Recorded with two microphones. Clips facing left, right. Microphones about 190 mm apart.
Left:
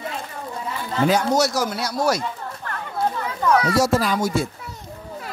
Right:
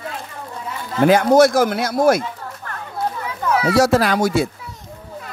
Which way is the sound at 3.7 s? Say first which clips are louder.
Right 4 dB; 70° right (ahead or behind).